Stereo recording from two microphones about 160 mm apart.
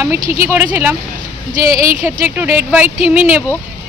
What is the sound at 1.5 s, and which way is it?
Speech, 60° right (ahead or behind).